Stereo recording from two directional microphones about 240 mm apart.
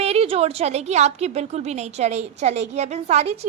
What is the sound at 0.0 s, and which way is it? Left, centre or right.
A woman's voice, right.